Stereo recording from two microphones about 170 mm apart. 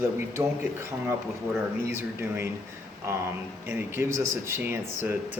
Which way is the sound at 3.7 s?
15° right (ahead or behind).